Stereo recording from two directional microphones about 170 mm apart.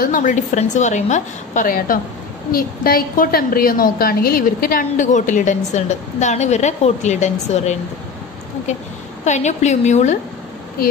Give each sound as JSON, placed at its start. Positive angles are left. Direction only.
{"t": 0.0, "sound": "a woman's voice", "side_deg": 50}